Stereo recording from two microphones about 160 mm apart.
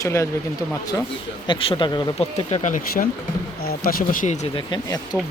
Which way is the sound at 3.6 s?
65° left (ahead or behind).